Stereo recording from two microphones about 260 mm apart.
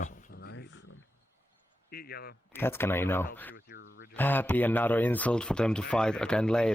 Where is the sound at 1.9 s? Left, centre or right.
Left.